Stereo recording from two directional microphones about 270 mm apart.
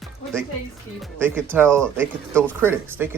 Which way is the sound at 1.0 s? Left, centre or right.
Centre.